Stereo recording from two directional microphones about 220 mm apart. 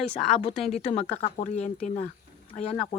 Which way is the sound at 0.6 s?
25° left (ahead or behind).